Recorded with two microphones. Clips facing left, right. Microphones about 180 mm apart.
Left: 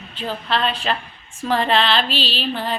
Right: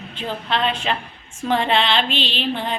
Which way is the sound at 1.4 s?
15° right (ahead or behind).